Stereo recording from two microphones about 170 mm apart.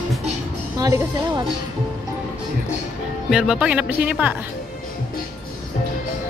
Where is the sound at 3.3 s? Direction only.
5° right (ahead or behind).